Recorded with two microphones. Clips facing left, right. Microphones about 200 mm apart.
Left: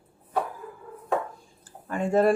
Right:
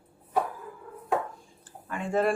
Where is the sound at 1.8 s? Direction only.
40° left (ahead or behind).